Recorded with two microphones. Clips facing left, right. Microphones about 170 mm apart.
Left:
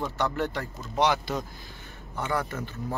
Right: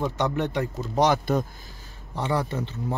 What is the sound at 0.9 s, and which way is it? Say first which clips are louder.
Speech: right 4 dB; 45° right (ahead or behind).